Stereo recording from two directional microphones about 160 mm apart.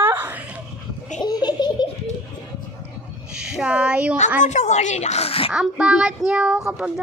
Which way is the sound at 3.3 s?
5° right (ahead or behind).